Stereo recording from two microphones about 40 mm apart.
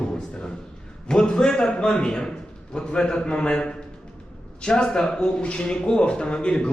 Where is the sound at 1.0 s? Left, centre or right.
Centre.